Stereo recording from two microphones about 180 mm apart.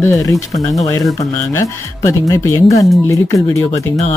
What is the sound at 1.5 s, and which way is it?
Speech, 15° left (ahead or behind).